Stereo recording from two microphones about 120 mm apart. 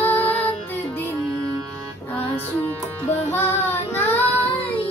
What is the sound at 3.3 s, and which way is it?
Child singing, 20° left (ahead or behind).